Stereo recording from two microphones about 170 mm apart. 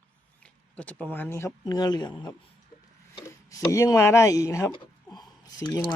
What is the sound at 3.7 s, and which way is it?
Speech, 20° left (ahead or behind).